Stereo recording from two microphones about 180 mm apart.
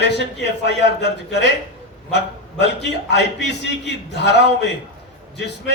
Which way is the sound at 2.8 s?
75° left (ahead or behind).